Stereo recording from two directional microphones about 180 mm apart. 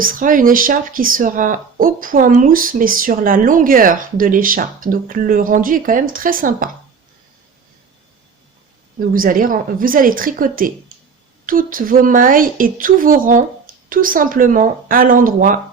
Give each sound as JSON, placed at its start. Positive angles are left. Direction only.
{"t": 0.0, "sound": "speech", "side_deg": -50}
{"t": 9.1, "sound": "speech", "side_deg": -50}